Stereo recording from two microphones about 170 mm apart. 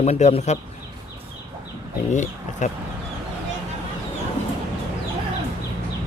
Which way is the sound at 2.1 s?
45° left (ahead or behind).